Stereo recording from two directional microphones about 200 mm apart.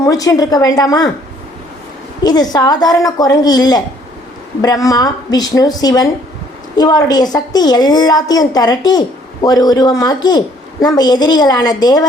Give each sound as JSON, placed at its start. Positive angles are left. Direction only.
{"t": 0.0, "sound": "speech", "side_deg": 15}
{"t": 2.2, "sound": "a woman's voice", "side_deg": 20}